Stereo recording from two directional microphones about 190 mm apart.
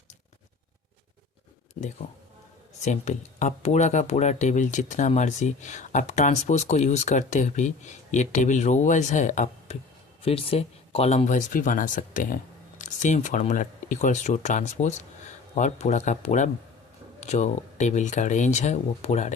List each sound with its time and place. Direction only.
2.8 s speech: 40° left (ahead or behind)
10.2 s speech: 30° left (ahead or behind)